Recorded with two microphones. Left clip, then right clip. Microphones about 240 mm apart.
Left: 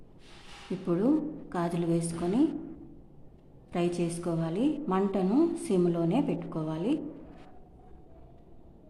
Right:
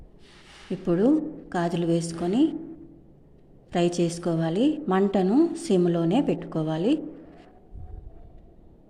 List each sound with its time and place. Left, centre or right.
0.9 s a woman's voice: centre
3.7 s a woman's voice: centre